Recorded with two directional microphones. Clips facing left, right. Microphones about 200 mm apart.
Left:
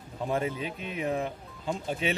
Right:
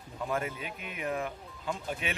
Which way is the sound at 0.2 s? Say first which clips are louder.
Left 4 dB; 25° left (ahead or behind).